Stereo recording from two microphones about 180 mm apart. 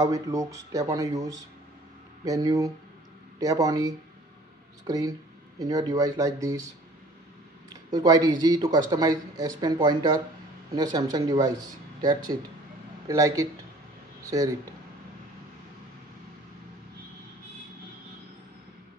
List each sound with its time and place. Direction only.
0.0 s speech: 20° right (ahead or behind)
7.7 s speech: 20° right (ahead or behind)